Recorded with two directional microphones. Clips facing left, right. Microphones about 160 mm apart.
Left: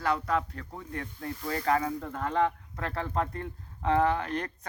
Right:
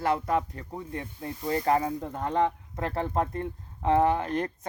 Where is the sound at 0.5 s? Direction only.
20° right (ahead or behind).